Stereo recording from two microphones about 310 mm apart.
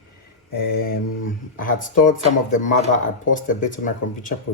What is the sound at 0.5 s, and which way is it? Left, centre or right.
Speech, left.